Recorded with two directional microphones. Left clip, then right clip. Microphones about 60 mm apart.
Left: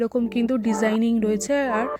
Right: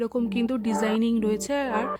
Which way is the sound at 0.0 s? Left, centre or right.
Left.